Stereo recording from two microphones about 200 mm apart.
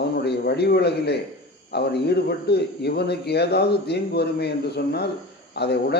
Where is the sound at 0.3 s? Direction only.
55° left (ahead or behind).